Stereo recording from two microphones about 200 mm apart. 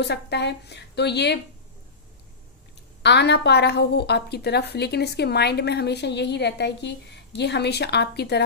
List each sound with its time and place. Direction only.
0.0 s a woman's voice: 55° left (ahead or behind)
3.0 s a woman's voice: 60° left (ahead or behind)